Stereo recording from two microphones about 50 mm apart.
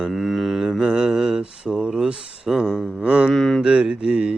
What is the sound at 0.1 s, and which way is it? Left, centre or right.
Mantra, centre.